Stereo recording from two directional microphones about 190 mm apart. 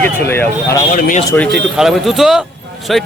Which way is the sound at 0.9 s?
45° left (ahead or behind).